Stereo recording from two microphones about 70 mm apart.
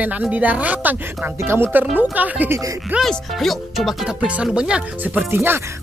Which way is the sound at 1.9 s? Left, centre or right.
Right.